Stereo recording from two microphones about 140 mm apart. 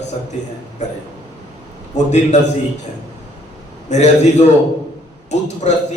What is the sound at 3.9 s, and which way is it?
A man's voice, 50° left (ahead or behind).